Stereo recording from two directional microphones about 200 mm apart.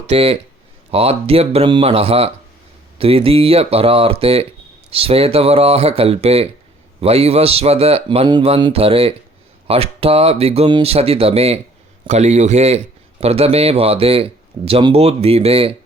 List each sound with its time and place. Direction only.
0.1 s a man's voice: 30° right (ahead or behind)